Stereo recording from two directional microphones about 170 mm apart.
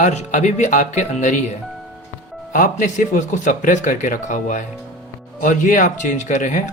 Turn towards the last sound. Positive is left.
turn(degrees=45)  # may be behind; listen again after turning